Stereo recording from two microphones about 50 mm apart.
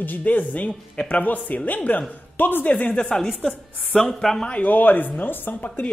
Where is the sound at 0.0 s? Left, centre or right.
Left.